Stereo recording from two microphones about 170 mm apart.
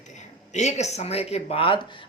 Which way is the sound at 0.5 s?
40° left (ahead or behind).